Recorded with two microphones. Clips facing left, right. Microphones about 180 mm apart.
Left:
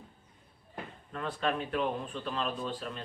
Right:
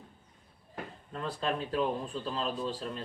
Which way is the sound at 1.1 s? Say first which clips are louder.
Left 1 dB; 30° right (ahead or behind).